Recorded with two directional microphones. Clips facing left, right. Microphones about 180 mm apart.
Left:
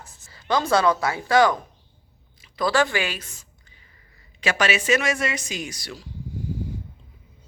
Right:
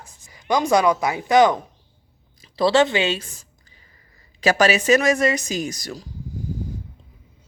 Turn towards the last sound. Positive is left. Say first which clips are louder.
# right 6 dB
turn(degrees=-40)  # may be behind; listen again after turning